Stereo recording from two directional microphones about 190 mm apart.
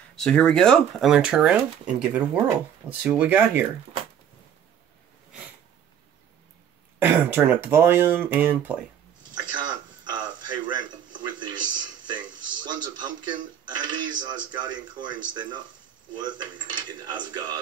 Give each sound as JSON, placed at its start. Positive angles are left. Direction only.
{"t": 0.1, "sound": "speech", "side_deg": 5}
{"t": 7.0, "sound": "speech", "side_deg": -10}
{"t": 9.3, "sound": "a sound", "side_deg": -25}
{"t": 12.1, "sound": "speech", "side_deg": -25}